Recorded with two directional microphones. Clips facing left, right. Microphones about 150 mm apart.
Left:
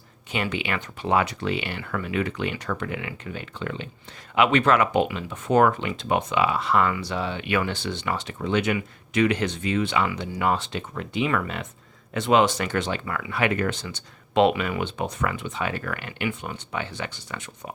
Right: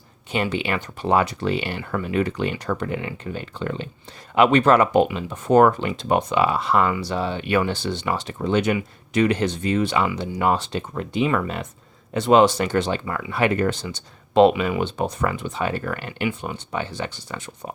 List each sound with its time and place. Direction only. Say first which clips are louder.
0.3 s speech: right 4 dB; 35° right (ahead or behind)
14.8 s speech: right 4 dB; 35° right (ahead or behind)